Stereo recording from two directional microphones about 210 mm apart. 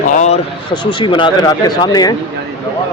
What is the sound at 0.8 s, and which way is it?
Speech, 25° left (ahead or behind).